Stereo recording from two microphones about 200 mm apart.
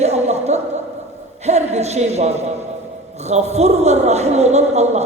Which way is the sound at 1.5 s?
35° right (ahead or behind).